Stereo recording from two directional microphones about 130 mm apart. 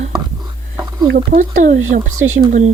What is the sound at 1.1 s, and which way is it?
Speech, 90° right.